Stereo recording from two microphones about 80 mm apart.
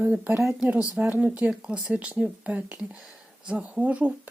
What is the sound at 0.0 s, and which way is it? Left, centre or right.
Speech, centre.